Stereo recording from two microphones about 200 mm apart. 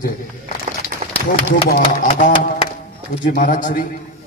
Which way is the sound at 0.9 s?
50° right (ahead or behind).